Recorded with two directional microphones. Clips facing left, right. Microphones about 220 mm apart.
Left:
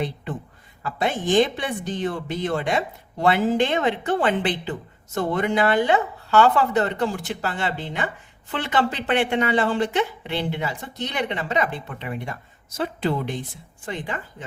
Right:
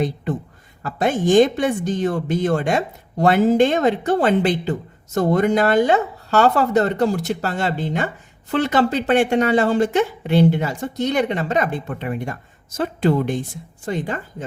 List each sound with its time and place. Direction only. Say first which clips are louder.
0.8 s speech: right 5 dB; 45° right (ahead or behind)